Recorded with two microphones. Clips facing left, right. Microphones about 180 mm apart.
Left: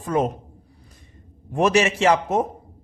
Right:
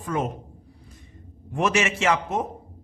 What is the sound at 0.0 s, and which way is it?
Speech, 35° left (ahead or behind).